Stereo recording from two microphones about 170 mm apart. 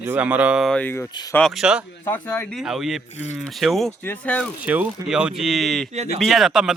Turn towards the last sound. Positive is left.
turn(degrees=-5)  # may be behind; listen again after turning